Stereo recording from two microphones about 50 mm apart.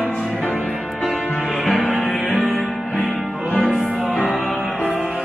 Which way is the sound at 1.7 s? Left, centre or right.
Right.